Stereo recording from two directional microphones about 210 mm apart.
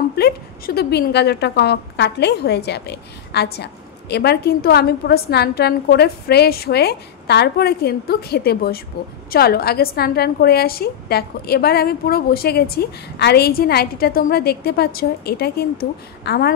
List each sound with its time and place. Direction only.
0.1 s a woman's voice: 50° left (ahead or behind)